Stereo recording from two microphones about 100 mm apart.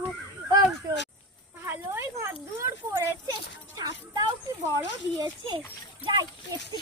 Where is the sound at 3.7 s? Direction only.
40° right (ahead or behind).